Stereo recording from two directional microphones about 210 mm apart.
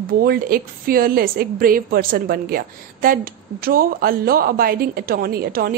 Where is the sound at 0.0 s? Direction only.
45° right (ahead or behind).